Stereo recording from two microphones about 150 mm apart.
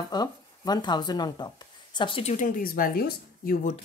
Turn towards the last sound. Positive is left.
turn(degrees=80)